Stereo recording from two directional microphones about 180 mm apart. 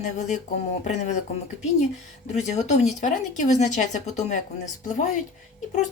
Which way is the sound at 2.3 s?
40° left (ahead or behind).